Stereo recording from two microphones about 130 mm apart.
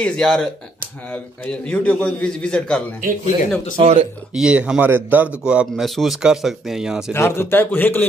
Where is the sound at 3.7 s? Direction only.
50° right (ahead or behind).